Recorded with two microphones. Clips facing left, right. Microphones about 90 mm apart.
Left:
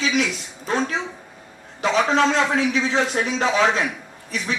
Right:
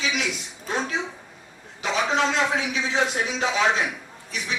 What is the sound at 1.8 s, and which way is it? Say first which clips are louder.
A man's voice: left 5 dB; 50° left (ahead or behind).